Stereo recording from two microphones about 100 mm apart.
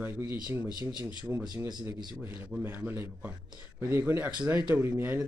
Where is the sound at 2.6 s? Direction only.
20° right (ahead or behind).